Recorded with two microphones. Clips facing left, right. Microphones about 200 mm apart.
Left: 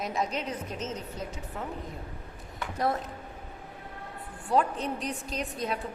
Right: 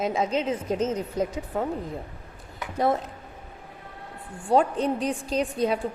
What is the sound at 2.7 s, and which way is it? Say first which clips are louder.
Speech: right 5 dB; 25° right (ahead or behind).